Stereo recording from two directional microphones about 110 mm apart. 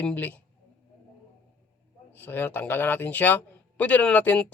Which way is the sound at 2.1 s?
20° left (ahead or behind).